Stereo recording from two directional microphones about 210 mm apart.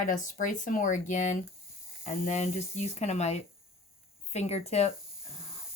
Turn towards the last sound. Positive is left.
turn(degrees=30)  # may be behind; listen again after turning